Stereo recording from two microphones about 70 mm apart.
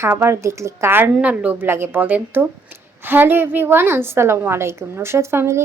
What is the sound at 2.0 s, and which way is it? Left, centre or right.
A woman's voice, right.